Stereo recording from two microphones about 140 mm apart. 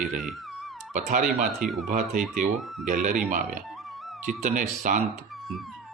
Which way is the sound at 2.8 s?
75° right (ahead or behind).